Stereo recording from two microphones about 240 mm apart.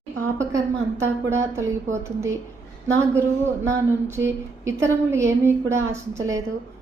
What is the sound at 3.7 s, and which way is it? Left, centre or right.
A woman's voice, centre.